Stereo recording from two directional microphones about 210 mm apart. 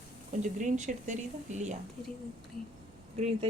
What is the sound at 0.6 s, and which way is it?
Speech, 35° right (ahead or behind).